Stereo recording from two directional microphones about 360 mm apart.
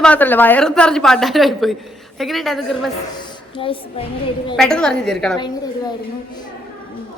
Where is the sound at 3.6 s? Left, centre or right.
Centre.